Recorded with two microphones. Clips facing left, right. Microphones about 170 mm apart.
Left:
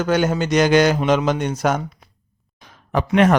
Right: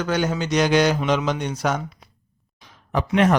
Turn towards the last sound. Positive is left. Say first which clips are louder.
# left 3 dB
turn(degrees=65)  # may be behind; listen again after turning